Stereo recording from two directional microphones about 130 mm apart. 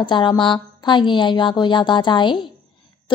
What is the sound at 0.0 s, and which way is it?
A woman's voice, 35° left (ahead or behind).